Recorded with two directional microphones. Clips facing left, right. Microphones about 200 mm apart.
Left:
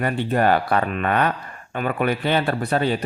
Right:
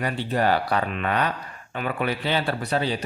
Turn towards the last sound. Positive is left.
turn(degrees=55)  # may be behind; listen again after turning